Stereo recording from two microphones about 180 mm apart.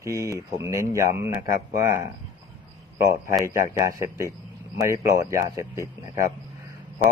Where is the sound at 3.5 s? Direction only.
15° right (ahead or behind).